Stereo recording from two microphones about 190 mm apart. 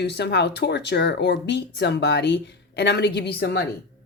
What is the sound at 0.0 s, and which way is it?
Speech, 60° left (ahead or behind).